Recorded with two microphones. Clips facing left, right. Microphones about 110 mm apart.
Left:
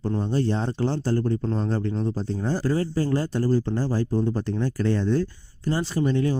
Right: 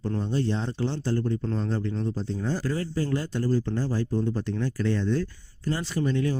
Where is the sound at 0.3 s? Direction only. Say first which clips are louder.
Left 3 dB; 40° left (ahead or behind).